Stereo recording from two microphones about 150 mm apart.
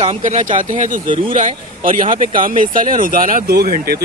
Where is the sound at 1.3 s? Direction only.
60° right (ahead or behind).